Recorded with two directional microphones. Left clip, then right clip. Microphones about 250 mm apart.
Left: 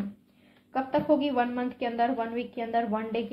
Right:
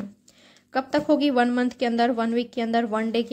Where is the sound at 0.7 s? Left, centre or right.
Right.